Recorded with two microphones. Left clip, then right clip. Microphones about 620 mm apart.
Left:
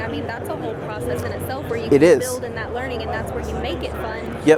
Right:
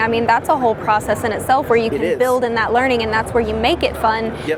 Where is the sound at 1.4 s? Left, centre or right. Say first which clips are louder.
Right 10 dB; right.